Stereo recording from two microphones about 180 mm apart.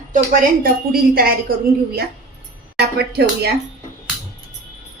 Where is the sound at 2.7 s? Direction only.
65° right (ahead or behind).